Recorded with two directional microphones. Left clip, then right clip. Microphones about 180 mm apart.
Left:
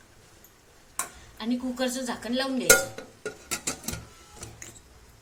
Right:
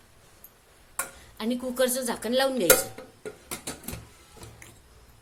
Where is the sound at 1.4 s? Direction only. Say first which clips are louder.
Right 4 dB; 60° right (ahead or behind).